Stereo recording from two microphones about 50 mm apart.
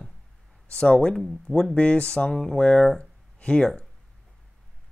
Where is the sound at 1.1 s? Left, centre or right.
Centre.